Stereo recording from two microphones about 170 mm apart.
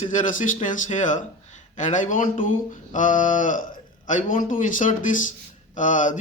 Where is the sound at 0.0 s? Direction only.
50° left (ahead or behind).